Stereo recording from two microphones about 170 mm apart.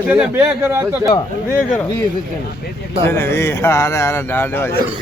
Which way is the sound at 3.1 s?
15° left (ahead or behind).